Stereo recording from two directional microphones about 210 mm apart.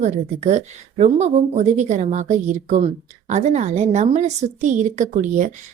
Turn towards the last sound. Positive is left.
turn(degrees=-35)  # may be behind; listen again after turning